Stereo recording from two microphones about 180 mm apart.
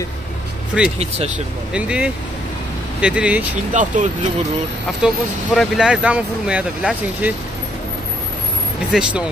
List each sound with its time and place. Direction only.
0.7 s speech: 5° right (ahead or behind)
3.7 s speech: 45° right (ahead or behind)
5.0 s speech: centre (ahead or behind)
8.9 s speech: 5° right (ahead or behind)